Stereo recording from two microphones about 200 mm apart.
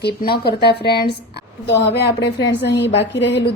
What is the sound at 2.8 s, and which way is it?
Speech, 65° left (ahead or behind).